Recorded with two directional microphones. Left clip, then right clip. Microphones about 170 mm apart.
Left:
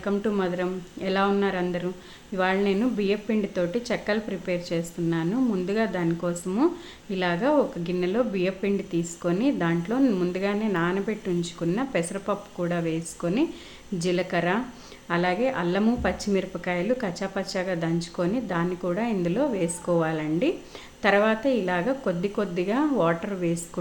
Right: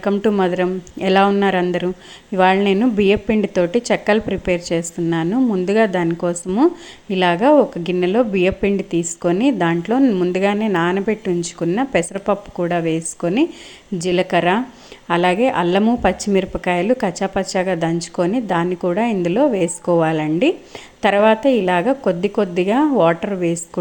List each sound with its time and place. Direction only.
0.0 s a woman's voice: 35° right (ahead or behind)
10.3 s a woman's voice: 35° right (ahead or behind)